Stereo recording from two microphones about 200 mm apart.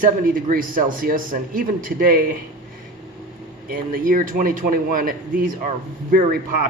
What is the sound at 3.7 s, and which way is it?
Speech, 45° right (ahead or behind).